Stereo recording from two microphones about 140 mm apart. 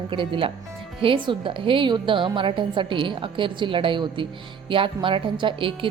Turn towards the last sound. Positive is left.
turn(degrees=-40)  # may be behind; listen again after turning